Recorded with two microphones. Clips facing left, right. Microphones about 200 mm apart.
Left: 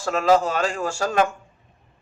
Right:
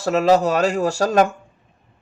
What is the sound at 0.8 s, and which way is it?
Speech, 40° right (ahead or behind).